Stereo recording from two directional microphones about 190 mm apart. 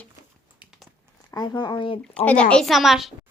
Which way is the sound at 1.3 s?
20° left (ahead or behind).